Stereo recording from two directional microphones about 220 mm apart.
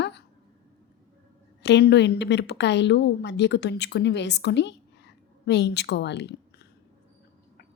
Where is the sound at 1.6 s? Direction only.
50° left (ahead or behind).